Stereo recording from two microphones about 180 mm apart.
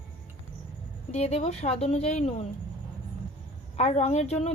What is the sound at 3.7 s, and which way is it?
Speech, 35° left (ahead or behind).